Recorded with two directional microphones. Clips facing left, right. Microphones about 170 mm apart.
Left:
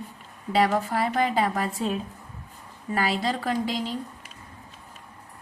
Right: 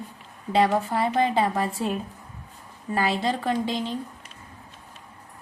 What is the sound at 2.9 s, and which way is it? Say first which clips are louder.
A woman's voice: right 1 dB; 25° right (ahead or behind).